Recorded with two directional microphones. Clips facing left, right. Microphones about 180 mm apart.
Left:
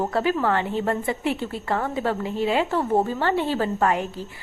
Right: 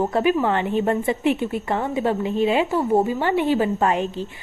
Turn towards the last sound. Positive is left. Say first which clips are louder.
# right 2 dB
turn(degrees=-20)  # may be behind; listen again after turning